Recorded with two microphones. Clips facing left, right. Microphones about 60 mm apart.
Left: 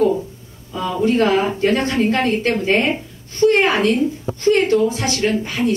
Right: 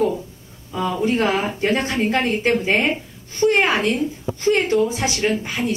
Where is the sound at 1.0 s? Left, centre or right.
Centre.